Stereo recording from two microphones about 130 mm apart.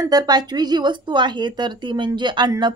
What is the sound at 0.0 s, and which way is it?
A woman's voice, 30° right (ahead or behind).